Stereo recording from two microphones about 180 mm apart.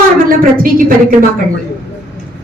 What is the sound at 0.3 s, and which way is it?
Speech, 50° right (ahead or behind).